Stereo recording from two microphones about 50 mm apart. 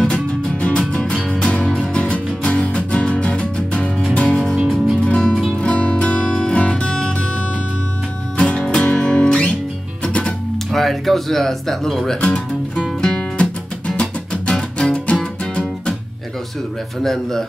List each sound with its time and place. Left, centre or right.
0.1 s music: left
8.4 s music: left
10.7 s speech: centre
12.2 s music: left
17.0 s speech: centre